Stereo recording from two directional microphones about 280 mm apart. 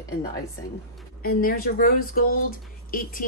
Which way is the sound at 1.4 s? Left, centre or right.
Left.